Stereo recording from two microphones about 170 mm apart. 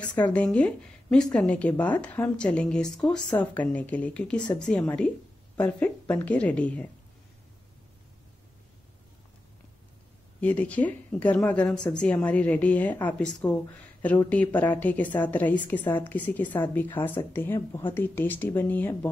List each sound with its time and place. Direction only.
0.0 s a woman's voice: 5° left (ahead or behind)
10.4 s a woman's voice: 10° left (ahead or behind)
17.6 s speech: 25° left (ahead or behind)
17.9 s a woman's voice: 10° left (ahead or behind)